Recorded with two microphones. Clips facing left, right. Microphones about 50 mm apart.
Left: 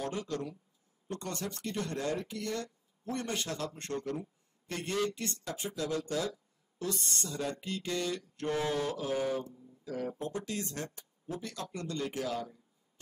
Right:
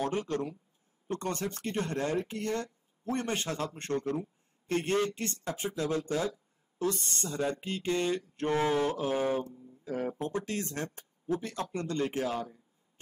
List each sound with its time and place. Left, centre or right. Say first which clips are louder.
0.0 s speech: right 4 dB; right